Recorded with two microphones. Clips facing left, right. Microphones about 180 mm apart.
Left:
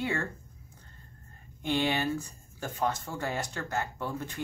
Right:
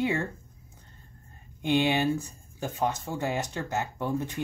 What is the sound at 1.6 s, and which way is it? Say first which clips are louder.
Speech: right 4 dB; 15° right (ahead or behind).